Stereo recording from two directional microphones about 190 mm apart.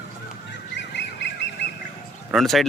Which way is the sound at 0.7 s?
65° left (ahead or behind).